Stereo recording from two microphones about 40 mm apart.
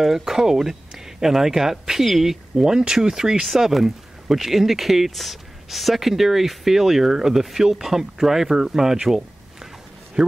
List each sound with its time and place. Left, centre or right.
0.0 s speech: centre
2.5 s speech: centre
3.4 s speech: centre
9.0 s a sound: centre
10.2 s speech: centre